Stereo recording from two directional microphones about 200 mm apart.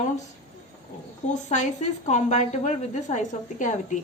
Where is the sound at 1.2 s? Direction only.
40° left (ahead or behind).